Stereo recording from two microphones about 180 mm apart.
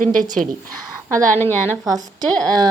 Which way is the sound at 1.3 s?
10° left (ahead or behind).